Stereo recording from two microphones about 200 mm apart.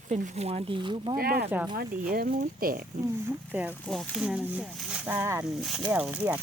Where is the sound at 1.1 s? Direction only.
45° right (ahead or behind).